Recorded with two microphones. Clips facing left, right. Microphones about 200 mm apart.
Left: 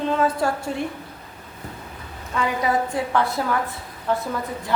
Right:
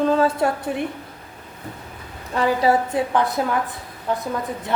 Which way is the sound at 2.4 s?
35° right (ahead or behind).